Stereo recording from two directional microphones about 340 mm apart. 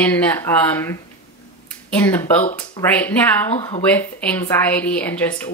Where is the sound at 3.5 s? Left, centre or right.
Centre.